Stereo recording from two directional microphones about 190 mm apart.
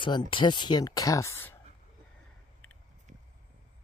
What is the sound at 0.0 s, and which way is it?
Speech, 25° left (ahead or behind).